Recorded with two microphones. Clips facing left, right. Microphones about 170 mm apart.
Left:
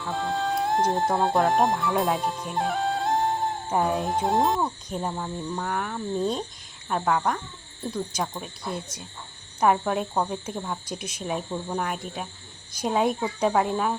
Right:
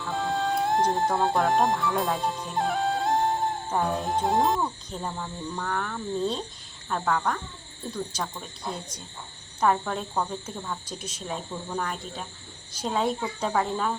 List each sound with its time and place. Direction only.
0.0 s music: centre (ahead or behind)
3.7 s speech: 5° left (ahead or behind)
4.6 s speech: 15° left (ahead or behind)